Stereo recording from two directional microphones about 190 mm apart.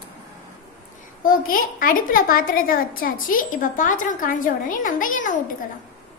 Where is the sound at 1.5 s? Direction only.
45° left (ahead or behind).